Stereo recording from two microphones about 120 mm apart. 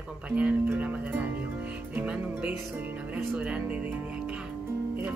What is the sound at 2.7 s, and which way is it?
Speech, 15° right (ahead or behind).